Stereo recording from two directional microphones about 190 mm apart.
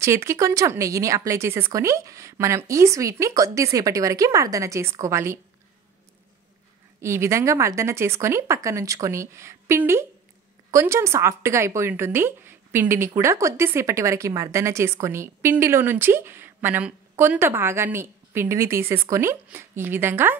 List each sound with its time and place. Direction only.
0.0 s a woman's voice: 15° right (ahead or behind)
7.0 s a woman's voice: 15° right (ahead or behind)